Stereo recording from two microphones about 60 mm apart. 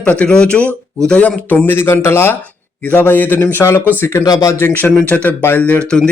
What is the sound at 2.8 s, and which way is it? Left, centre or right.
Speech, left.